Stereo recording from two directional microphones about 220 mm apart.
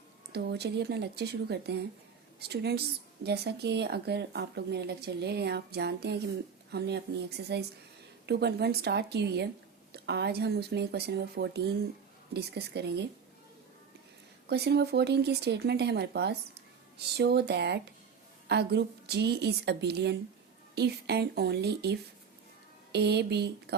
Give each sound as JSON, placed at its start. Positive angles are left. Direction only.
{"t": 0.3, "sound": "speech", "side_deg": -50}
{"t": 14.5, "sound": "speech", "side_deg": -50}